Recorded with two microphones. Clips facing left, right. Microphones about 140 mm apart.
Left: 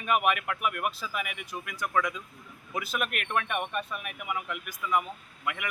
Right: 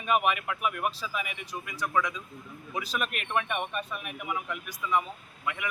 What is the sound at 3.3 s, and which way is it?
Speech, centre (ahead or behind).